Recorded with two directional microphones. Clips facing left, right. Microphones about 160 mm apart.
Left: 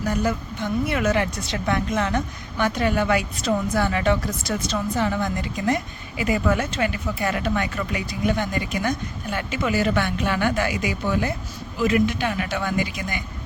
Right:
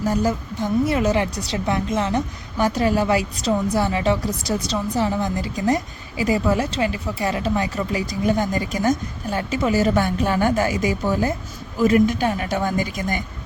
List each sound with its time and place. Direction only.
0.0 s a woman's voice: 40° right (ahead or behind)